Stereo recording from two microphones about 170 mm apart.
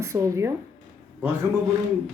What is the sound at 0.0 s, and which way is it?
Speech, 15° right (ahead or behind).